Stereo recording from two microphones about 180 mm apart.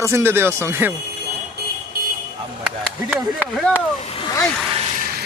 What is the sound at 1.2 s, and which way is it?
Vehicle, 65° left (ahead or behind).